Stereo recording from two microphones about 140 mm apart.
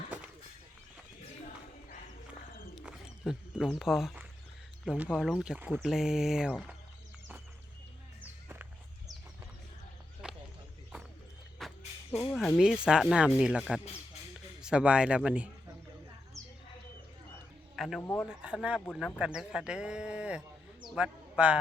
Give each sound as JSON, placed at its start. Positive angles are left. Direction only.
{"t": 2.7, "sound": "a sound", "side_deg": -5}
{"t": 4.9, "sound": "speech", "side_deg": -5}
{"t": 8.2, "sound": "music", "side_deg": -10}
{"t": 10.2, "sound": "a sound", "side_deg": -5}
{"t": 11.6, "sound": "music", "side_deg": 0}
{"t": 12.1, "sound": "speech", "side_deg": 5}
{"t": 12.5, "sound": "speech", "side_deg": -5}
{"t": 17.7, "sound": "speech", "side_deg": 0}
{"t": 18.0, "sound": "speech", "side_deg": 15}
{"t": 18.3, "sound": "speech", "side_deg": -5}